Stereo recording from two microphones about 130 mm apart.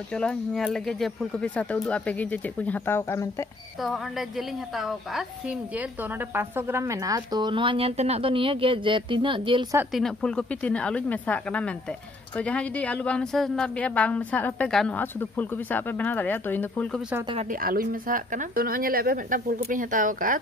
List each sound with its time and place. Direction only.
0.1 s a woman's voice: 5° left (ahead or behind); by 3.4 s 20° left (ahead or behind)
3.8 s a woman's voice: centre (ahead or behind)
6.1 s speech: 15° right (ahead or behind); by 9.7 s 40° right (ahead or behind)
9.9 s a woman's voice: 5° left (ahead or behind)
17.5 s speech: 90° right